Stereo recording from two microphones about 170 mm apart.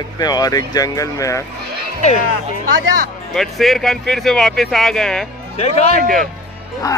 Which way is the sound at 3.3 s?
Centre (ahead or behind).